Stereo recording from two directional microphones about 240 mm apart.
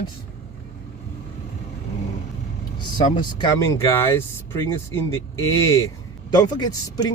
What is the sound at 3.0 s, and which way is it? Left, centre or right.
Speech, centre.